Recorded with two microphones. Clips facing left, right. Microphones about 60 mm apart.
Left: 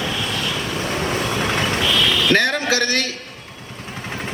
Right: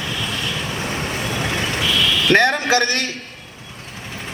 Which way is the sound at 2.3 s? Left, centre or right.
Right.